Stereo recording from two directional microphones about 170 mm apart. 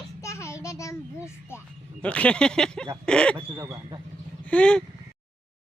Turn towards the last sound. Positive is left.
turn(degrees=5)  # may be behind; listen again after turning